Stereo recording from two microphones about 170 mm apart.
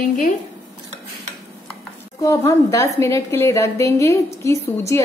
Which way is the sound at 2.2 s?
20° left (ahead or behind).